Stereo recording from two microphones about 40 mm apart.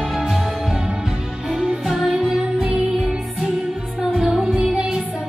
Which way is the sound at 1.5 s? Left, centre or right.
Centre.